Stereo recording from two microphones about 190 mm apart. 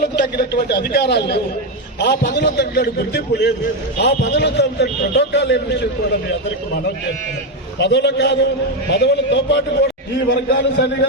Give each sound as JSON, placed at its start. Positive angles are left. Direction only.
{"t": 0.0, "sound": "a man's voice", "side_deg": 55}
{"t": 7.8, "sound": "a man's voice", "side_deg": 65}